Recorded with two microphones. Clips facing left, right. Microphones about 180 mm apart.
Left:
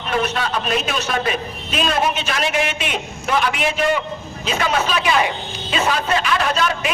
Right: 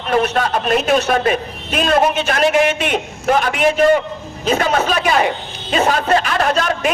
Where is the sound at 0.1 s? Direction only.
50° right (ahead or behind).